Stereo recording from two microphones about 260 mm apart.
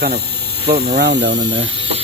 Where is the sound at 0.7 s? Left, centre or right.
Right.